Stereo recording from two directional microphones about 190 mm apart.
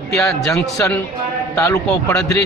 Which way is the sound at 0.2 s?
15° left (ahead or behind).